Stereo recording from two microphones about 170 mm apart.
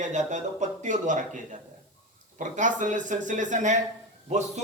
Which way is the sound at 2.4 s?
45° right (ahead or behind).